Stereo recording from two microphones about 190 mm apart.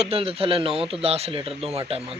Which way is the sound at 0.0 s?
30° right (ahead or behind).